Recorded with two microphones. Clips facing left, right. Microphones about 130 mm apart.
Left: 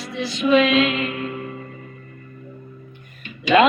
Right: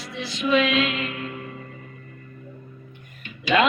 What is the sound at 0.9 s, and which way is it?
Music, 40° left (ahead or behind).